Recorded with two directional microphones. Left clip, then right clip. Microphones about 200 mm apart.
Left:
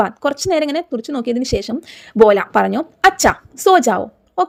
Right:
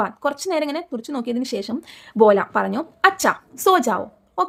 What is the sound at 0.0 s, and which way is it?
Speech, 25° left (ahead or behind).